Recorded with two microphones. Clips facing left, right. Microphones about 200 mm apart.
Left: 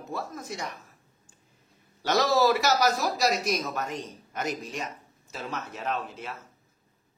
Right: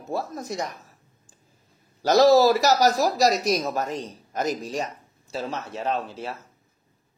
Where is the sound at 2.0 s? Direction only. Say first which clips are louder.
Right 7 dB; 35° right (ahead or behind).